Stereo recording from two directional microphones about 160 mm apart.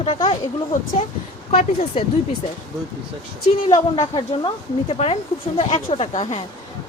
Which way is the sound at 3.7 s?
25° left (ahead or behind).